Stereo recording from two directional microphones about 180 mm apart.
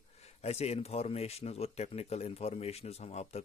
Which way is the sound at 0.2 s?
35° left (ahead or behind).